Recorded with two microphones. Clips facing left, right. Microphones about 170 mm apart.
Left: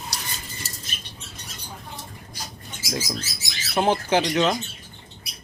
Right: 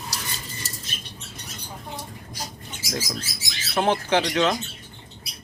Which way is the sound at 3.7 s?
10° left (ahead or behind).